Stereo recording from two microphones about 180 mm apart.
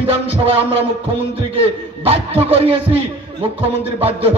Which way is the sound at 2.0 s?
35° right (ahead or behind).